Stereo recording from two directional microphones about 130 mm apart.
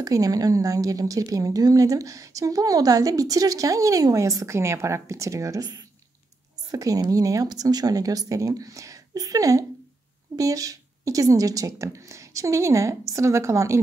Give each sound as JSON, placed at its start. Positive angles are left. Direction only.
{"t": 0.0, "sound": "a woman's voice", "side_deg": -30}